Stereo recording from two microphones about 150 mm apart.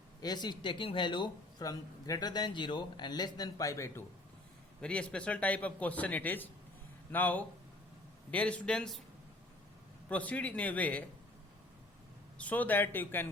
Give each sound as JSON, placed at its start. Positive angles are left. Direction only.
{"t": 0.2, "sound": "speech", "side_deg": 30}
{"t": 4.8, "sound": "a man's voice", "side_deg": 10}
{"t": 10.1, "sound": "a man's voice", "side_deg": 10}
{"t": 12.4, "sound": "a man's voice", "side_deg": 10}